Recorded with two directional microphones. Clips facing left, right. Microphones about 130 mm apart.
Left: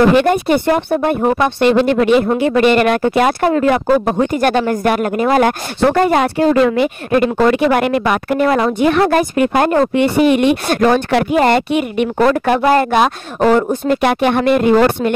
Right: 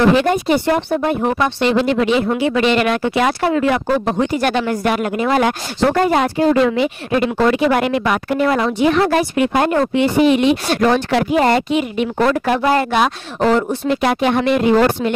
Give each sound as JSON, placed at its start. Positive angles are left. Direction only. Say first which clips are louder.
{"t": 0.1, "sound": "speech", "louder": "left 2 dB", "side_deg": 55}